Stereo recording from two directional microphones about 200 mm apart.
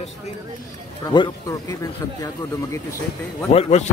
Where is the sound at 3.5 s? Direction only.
35° left (ahead or behind).